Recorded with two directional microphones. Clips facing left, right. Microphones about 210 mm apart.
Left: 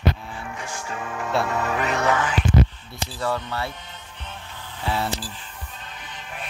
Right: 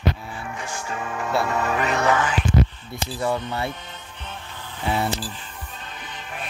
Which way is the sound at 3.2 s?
20° right (ahead or behind).